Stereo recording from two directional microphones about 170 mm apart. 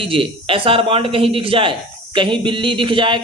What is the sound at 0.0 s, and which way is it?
Speech, 30° right (ahead or behind).